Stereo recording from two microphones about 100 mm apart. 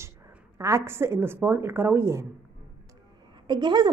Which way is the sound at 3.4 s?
50° right (ahead or behind).